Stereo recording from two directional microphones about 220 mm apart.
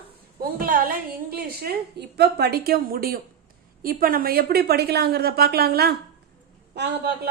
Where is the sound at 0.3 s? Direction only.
40° right (ahead or behind).